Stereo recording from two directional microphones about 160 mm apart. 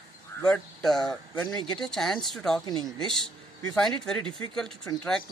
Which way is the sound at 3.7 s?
5° left (ahead or behind).